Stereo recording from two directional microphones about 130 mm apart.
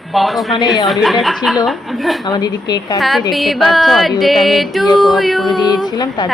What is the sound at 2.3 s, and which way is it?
Speech, 30° left (ahead or behind).